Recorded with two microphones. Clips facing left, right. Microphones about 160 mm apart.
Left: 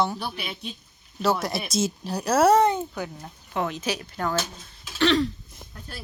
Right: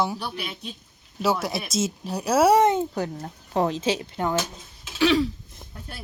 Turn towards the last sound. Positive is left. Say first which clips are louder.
# right 1 dB
turn(degrees=-5)  # may be behind; listen again after turning